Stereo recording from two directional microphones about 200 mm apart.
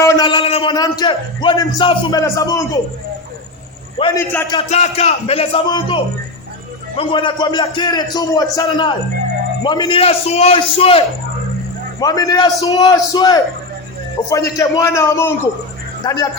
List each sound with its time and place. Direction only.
0.0 s a man's voice: 20° left (ahead or behind)
3.9 s a man's voice: 25° left (ahead or behind)
4.2 s a man's voice: 10° left (ahead or behind)
4.5 s a man's voice: 30° left (ahead or behind)